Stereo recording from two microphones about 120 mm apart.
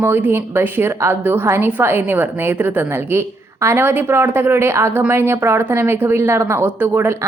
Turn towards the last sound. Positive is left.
turn(degrees=-20)  # may be behind; listen again after turning